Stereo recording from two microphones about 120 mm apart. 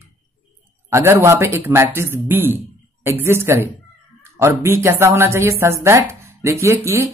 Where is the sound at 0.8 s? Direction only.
20° right (ahead or behind).